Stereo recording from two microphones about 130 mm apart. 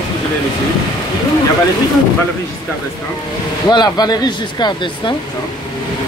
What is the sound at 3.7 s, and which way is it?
Speech, 35° left (ahead or behind).